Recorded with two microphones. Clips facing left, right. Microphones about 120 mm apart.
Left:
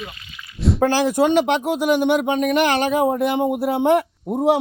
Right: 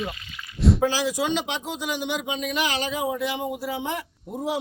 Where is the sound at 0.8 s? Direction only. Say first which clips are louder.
Left 7 dB; 55° left (ahead or behind).